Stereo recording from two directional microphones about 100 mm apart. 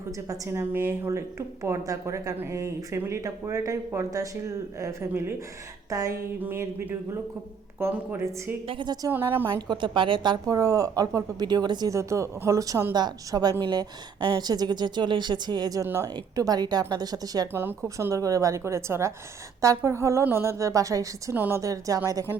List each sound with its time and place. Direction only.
0.3 s a woman's voice: 25° right (ahead or behind)
6.4 s a woman's voice: 25° right (ahead or behind)
8.6 s a woman's voice: 65° right (ahead or behind)
8.9 s speech: 40° right (ahead or behind)
9.1 s a woman's voice: 20° right (ahead or behind)
9.6 s a woman's voice: 50° right (ahead or behind)
11.9 s a woman's voice: 30° right (ahead or behind)
17.5 s a woman's voice: 20° right (ahead or behind)
17.8 s a woman's voice: 35° right (ahead or behind)
21.3 s a woman's voice: 20° right (ahead or behind)
21.6 s speech: 35° right (ahead or behind)